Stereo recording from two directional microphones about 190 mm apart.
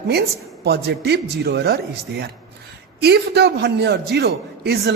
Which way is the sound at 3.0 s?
60° right (ahead or behind).